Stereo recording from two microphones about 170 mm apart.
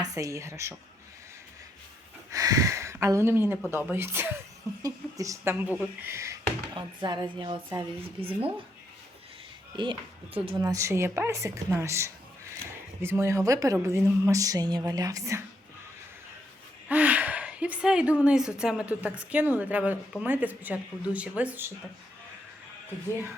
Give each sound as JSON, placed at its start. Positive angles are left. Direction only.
{"t": 0.0, "sound": "speech", "side_deg": -20}
{"t": 2.3, "sound": "a woman's voice", "side_deg": -20}
{"t": 9.7, "sound": "a woman's voice", "side_deg": -30}
{"t": 10.7, "sound": "a woman's voice", "side_deg": -20}
{"t": 16.9, "sound": "gasp", "side_deg": -10}
{"t": 18.2, "sound": "a woman's voice", "side_deg": -5}